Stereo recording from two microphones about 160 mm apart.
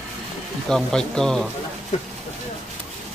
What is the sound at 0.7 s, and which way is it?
Speech, 5° left (ahead or behind).